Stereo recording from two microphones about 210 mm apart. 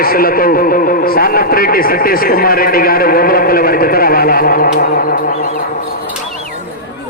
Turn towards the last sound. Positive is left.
turn(degrees=40)  # may be behind; listen again after turning